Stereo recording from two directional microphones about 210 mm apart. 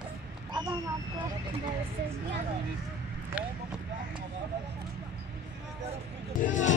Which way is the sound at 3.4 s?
5° right (ahead or behind).